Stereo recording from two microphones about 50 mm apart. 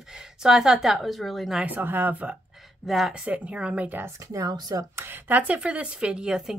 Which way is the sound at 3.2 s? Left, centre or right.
Right.